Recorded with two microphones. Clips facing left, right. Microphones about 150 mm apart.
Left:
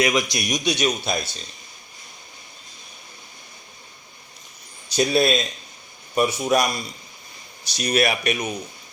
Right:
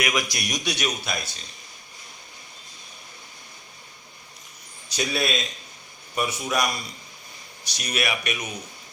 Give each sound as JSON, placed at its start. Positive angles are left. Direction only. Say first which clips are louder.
{"t": 0.0, "sound": "speech", "louder": "left 5 dB", "side_deg": 25}
{"t": 4.9, "sound": "speech", "louder": "left 7 dB", "side_deg": 35}